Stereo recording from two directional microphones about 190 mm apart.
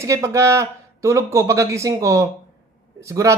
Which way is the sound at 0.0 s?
15° right (ahead or behind).